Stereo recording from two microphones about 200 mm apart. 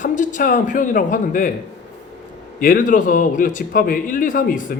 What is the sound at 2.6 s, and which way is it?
Speech, 45° left (ahead or behind).